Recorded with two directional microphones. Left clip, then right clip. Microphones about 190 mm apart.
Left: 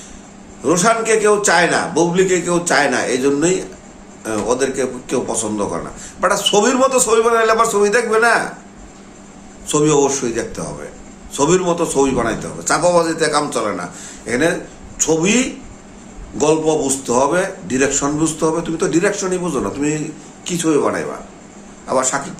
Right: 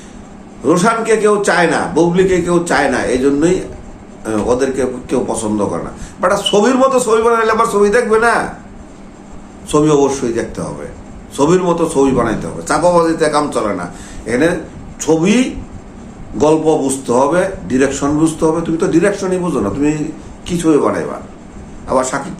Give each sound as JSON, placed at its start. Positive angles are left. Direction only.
{"t": 0.6, "sound": "a man's voice", "side_deg": 10}
{"t": 9.6, "sound": "a man's voice", "side_deg": 10}